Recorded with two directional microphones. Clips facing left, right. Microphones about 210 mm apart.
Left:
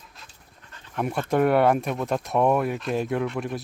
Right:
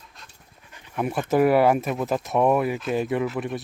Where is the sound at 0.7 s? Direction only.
15° right (ahead or behind).